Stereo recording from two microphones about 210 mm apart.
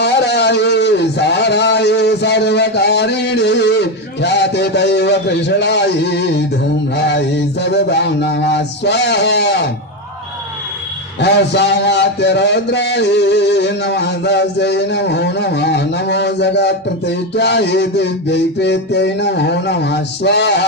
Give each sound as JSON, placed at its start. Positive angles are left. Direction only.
{"t": 0.0, "sound": "a man's voice", "side_deg": 55}
{"t": 11.1, "sound": "a man's voice", "side_deg": 55}